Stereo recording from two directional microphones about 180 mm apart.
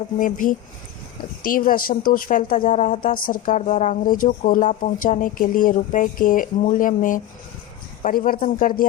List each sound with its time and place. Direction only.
0.2 s speech: 50° left (ahead or behind)